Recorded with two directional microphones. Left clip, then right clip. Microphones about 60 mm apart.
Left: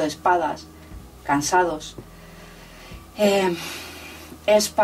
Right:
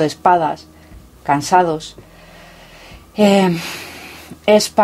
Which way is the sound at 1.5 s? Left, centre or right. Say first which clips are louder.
Right 7 dB; right.